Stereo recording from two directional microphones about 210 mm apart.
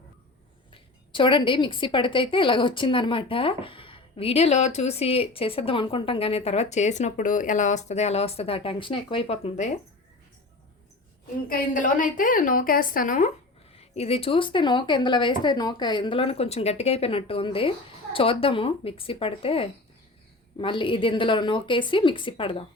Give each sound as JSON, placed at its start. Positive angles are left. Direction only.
{"t": 0.7, "sound": "a woman's voice", "side_deg": 25}
{"t": 11.4, "sound": "a woman's voice", "side_deg": 40}
{"t": 13.7, "sound": "a woman's voice", "side_deg": 30}